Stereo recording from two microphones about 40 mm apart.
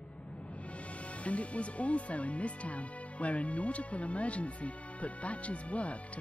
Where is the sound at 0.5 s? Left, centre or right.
Left.